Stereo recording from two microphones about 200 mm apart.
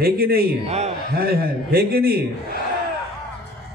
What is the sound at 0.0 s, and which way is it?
Speech, 50° right (ahead or behind).